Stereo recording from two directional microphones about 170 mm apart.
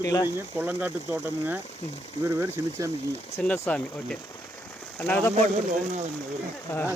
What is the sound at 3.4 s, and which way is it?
Speech, 5° left (ahead or behind).